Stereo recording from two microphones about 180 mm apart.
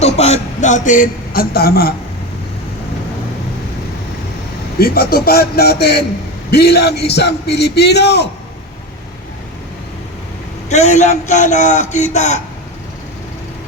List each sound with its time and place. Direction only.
0.0 s a man's voice: 35° left (ahead or behind); by 1.9 s 55° left (ahead or behind)
4.8 s a man's voice: 55° left (ahead or behind)
10.7 s a man's voice: 40° left (ahead or behind)